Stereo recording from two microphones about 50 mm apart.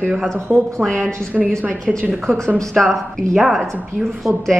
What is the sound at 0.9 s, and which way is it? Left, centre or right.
Speech, centre.